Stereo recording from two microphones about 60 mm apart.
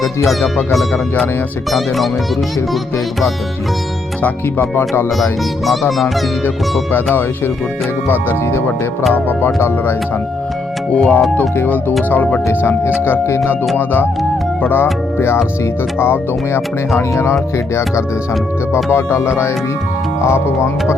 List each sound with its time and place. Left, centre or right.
0.3 s speech: centre
4.7 s speech: left
6.9 s speech: left
9.6 s speech: left
10.9 s speech: left
11.3 s speech: left
12.5 s speech: left
13.7 s speech: left